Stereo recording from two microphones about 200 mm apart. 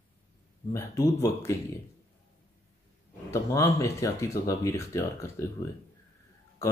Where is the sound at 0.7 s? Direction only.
15° left (ahead or behind).